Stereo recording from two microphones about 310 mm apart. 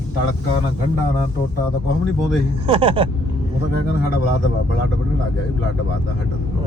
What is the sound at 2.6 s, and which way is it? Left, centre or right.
Speech, centre.